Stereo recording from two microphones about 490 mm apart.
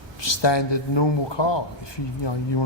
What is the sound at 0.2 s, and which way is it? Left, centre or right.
A man's voice, left.